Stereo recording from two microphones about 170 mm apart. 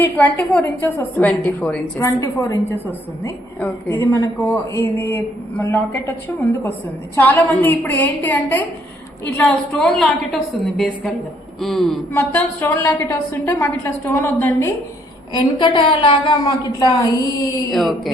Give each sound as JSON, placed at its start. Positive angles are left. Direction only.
{"t": 0.0, "sound": "a woman's voice", "side_deg": 10}
{"t": 12.1, "sound": "a woman's voice", "side_deg": 10}
{"t": 15.3, "sound": "a woman's voice", "side_deg": 25}
{"t": 17.7, "sound": "a woman's voice", "side_deg": 0}